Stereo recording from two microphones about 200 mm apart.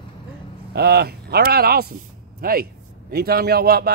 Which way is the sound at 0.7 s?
55° right (ahead or behind).